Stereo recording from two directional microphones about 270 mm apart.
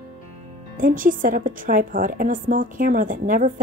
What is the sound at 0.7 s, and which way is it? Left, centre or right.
A woman's voice, right.